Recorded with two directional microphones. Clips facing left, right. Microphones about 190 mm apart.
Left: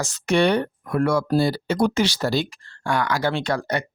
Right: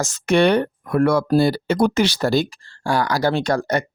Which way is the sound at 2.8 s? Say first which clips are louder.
Right 3 dB; 35° right (ahead or behind).